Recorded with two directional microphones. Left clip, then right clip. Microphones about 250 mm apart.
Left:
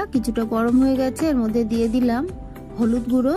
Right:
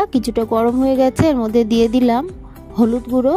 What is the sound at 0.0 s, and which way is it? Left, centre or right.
Speech, right.